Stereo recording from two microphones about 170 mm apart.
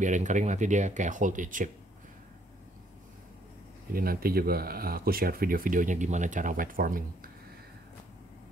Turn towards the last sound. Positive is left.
turn(degrees=-55)  # may be behind; listen again after turning